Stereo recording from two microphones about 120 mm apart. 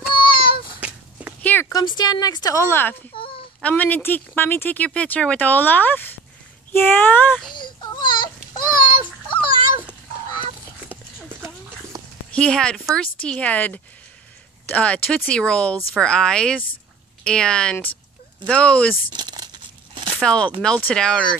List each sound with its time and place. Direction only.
0.1 s child singing: 45° left (ahead or behind)
0.7 s a sound: 10° right (ahead or behind)
1.4 s a sound: 15° left (ahead or behind)
1.7 s speech: 35° left (ahead or behind)
2.7 s speech: 20° left (ahead or behind)
3.2 s child singing: 50° left (ahead or behind)
3.6 s speech: 15° left (ahead or behind)
7.4 s a sound: 40° left (ahead or behind)
10.9 s a sound: 15° right (ahead or behind)
12.3 s speech: 10° left (ahead or behind)
19.1 s crumpling: 35° right (ahead or behind)
20.2 s speech: 10° left (ahead or behind)